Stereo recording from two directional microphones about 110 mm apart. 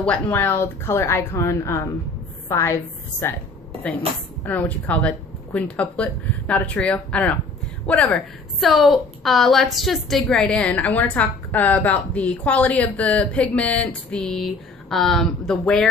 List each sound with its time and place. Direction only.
0.0 s a woman's voice: 15° left (ahead or behind)
4.4 s a woman's voice: 15° left (ahead or behind)
8.5 s a woman's voice: centre (ahead or behind)